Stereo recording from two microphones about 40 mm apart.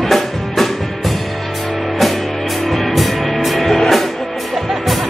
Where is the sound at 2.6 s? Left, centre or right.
Centre.